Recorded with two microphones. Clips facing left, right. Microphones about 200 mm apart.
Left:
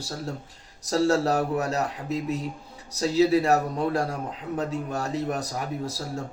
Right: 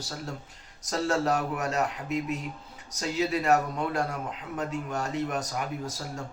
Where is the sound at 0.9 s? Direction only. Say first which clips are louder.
Left 5 dB; 30° left (ahead or behind).